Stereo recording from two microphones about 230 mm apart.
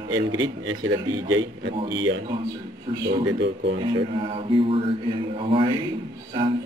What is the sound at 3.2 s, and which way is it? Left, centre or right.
Speech, right.